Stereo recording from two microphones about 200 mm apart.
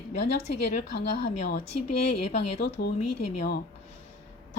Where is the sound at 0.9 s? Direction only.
55° left (ahead or behind).